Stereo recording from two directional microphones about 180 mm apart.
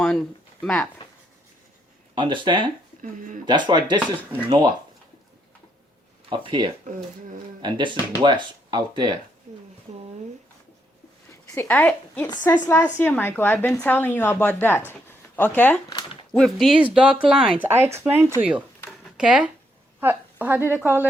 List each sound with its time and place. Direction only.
0.6 s speech: 5° left (ahead or behind)
2.1 s speech: 25° right (ahead or behind)
3.0 s speech: 45° right (ahead or behind)
3.4 s speech: 25° right (ahead or behind)
6.3 s speech: 25° right (ahead or behind)
6.8 s speech: 45° right (ahead or behind)
7.6 s speech: 25° right (ahead or behind)
9.5 s speech: 45° right (ahead or behind)
11.3 s a woman's voice: 10° left (ahead or behind); by 18.6 s 5° right (ahead or behind)
18.9 s a sound: 5° right (ahead or behind)
20.0 s a woman's voice: 10° right (ahead or behind)